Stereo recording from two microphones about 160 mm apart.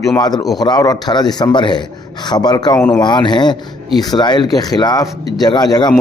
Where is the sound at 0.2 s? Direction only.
25° left (ahead or behind).